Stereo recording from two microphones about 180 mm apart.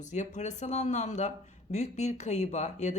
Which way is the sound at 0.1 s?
40° left (ahead or behind).